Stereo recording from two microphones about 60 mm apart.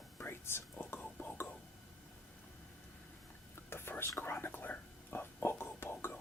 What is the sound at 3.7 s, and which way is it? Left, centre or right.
Whispering, left.